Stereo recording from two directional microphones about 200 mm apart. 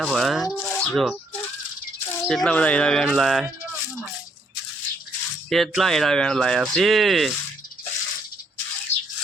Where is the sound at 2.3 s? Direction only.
5° left (ahead or behind).